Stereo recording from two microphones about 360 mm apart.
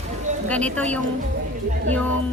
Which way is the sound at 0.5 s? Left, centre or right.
Centre.